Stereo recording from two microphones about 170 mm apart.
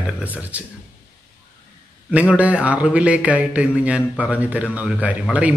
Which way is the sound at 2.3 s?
10° right (ahead or behind).